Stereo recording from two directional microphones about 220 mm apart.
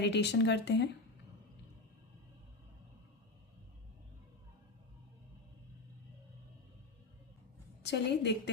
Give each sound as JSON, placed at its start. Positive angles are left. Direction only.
{"t": 0.0, "sound": "speech", "side_deg": 50}
{"t": 7.8, "sound": "a woman's voice", "side_deg": 50}